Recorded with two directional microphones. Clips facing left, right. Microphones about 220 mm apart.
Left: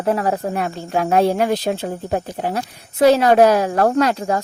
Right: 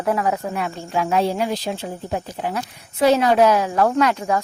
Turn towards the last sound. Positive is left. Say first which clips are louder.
# left 2 dB
turn(degrees=35)  # may be behind; listen again after turning